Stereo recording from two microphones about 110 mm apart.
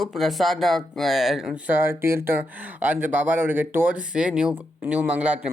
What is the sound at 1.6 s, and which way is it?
Speech, 20° right (ahead or behind).